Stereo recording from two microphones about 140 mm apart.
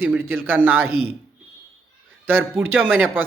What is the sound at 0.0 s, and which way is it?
Speech, 15° right (ahead or behind).